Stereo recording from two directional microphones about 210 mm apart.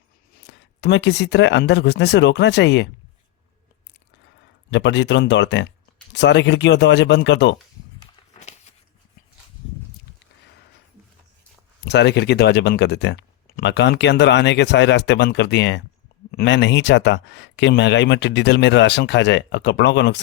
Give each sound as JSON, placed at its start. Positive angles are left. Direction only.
{"t": 0.3, "sound": "speech", "side_deg": 55}
{"t": 4.7, "sound": "speech", "side_deg": 60}
{"t": 8.3, "sound": "walk", "side_deg": 30}
{"t": 11.9, "sound": "speech", "side_deg": 55}